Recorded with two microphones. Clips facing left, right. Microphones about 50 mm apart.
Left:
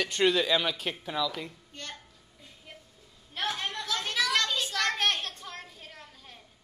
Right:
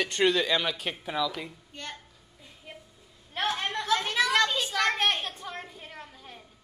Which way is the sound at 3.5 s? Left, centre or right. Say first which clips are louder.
Right 6 dB; right.